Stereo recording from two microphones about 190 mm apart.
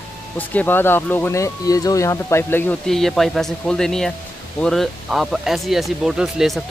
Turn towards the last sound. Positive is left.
turn(degrees=0)  # may be behind; listen again after turning